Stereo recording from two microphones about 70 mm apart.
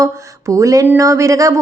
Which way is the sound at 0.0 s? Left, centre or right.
Right.